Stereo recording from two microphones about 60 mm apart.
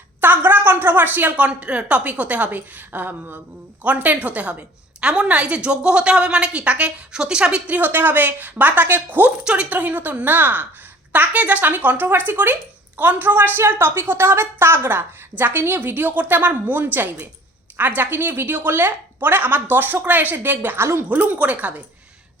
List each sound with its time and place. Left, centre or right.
0.2 s a woman's voice: right
1.5 s a woman's voice: centre
7.7 s a woman's voice: right
9.4 s a woman's voice: centre
9.6 s a woman's voice: right
21.1 s a woman's voice: right